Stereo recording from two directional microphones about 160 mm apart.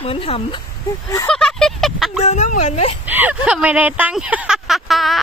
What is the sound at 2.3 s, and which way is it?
Speech, 50° left (ahead or behind).